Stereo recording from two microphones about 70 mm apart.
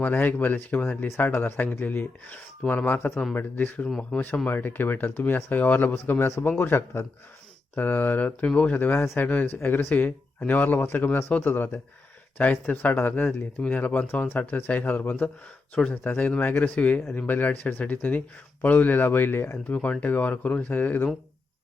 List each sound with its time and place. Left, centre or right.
0.0 s speech: left
3.8 s speech: centre
4.4 s speech: left
13.6 s speech: left
15.7 s speech: left
19.7 s speech: left